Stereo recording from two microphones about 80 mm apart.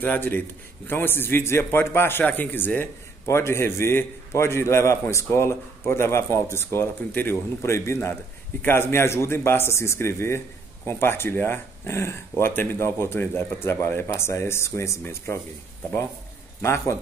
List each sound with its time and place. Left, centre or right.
0.0 s a man's voice: left
16.6 s speech: left